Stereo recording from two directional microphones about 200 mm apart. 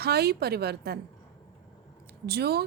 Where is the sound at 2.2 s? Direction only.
55° right (ahead or behind).